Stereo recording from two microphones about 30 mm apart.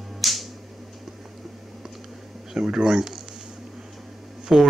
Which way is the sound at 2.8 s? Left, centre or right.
Centre.